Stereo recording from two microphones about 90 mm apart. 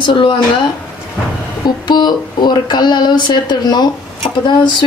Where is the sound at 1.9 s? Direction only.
55° left (ahead or behind).